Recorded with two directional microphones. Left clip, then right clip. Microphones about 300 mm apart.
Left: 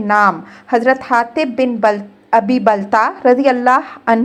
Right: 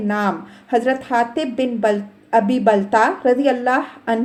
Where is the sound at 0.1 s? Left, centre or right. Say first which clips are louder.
Left 11 dB; left.